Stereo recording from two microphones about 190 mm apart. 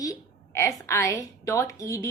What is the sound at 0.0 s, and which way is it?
A woman's voice, 15° left (ahead or behind).